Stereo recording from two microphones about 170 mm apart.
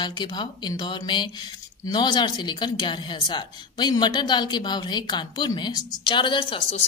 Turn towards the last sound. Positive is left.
turn(degrees=35)  # may be behind; listen again after turning